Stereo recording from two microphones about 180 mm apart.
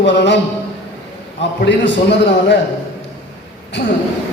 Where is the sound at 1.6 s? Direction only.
80° left.